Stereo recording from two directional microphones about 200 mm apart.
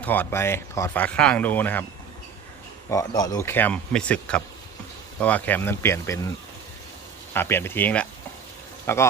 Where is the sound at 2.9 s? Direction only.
20° left (ahead or behind).